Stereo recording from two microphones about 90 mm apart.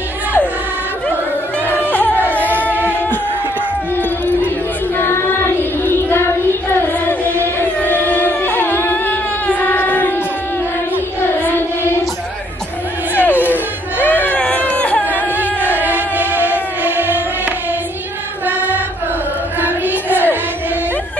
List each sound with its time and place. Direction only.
1.7 s crowd: 20° left (ahead or behind)
2.3 s music: 20° left (ahead or behind)
4.9 s child singing: 25° left (ahead or behind)
6.9 s music: 20° left (ahead or behind)
7.8 s carnatic music: 20° left (ahead or behind)
13.2 s a sound: 20° left (ahead or behind)
16.3 s music: 20° right (ahead or behind)
19.6 s child singing: 20° right (ahead or behind)